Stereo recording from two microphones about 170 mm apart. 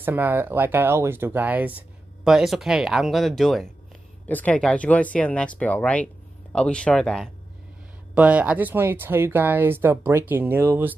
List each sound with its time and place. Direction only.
0.0 s speech: 10° right (ahead or behind); by 7.2 s 5° left (ahead or behind)
8.1 s speech: 10° right (ahead or behind)